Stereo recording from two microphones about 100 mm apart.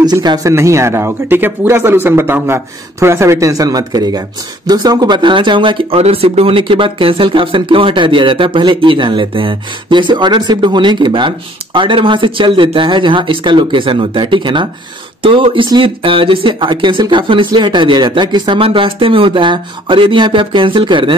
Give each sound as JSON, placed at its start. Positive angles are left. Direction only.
{"t": 0.0, "sound": "speech", "side_deg": -45}
{"t": 0.5, "sound": "speech", "side_deg": -30}